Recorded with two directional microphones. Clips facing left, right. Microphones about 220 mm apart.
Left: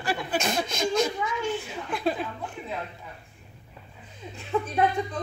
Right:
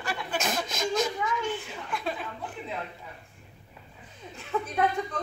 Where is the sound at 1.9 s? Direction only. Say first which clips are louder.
Left 6 dB; 35° left (ahead or behind).